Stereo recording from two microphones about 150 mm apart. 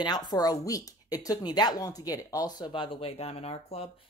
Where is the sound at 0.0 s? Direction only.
30° left (ahead or behind).